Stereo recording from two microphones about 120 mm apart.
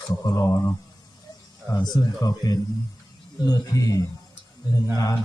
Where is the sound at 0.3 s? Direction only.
25° left (ahead or behind).